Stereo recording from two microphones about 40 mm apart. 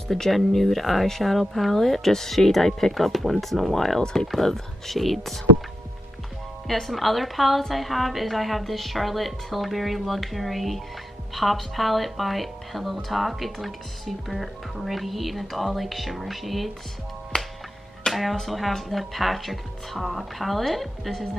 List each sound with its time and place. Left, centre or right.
0.1 s speech: centre
4.0 s speech: centre
4.3 s speech: centre
6.7 s speech: centre
18.3 s speech: centre